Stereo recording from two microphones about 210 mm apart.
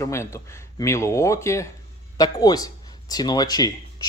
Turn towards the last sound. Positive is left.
turn(degrees=20)  # may be behind; listen again after turning